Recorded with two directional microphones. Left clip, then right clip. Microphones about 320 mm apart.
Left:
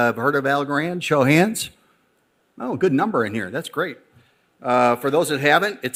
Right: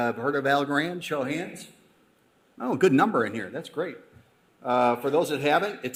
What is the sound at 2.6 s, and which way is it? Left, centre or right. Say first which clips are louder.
Speech: left 1 dB; centre.